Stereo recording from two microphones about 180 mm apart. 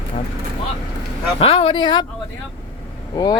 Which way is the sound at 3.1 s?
20° left (ahead or behind).